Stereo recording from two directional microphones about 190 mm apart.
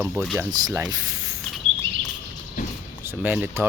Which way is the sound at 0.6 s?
20° right (ahead or behind).